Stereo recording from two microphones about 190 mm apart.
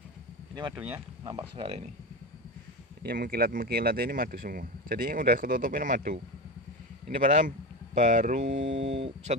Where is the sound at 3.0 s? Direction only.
50° right (ahead or behind).